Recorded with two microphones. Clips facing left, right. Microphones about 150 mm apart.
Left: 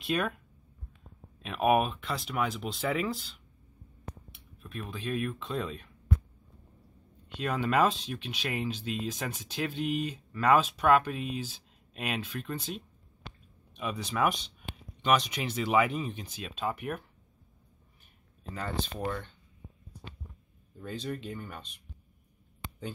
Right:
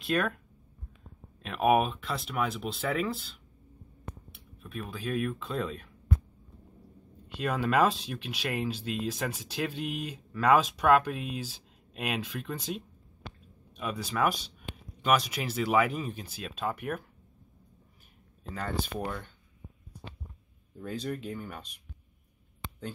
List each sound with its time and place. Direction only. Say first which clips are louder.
0.0 s speech: right 2 dB; centre (ahead or behind)
1.4 s speech: right 1 dB; centre (ahead or behind)
7.2 s speech: right 1 dB; 5° right (ahead or behind)
19.0 s speech: left 2 dB; 5° right (ahead or behind)
20.8 s speech: right 2 dB; 5° right (ahead or behind)